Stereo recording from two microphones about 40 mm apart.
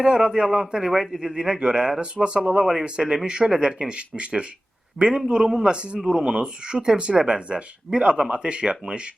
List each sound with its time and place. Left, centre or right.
0.0 s a man's voice: centre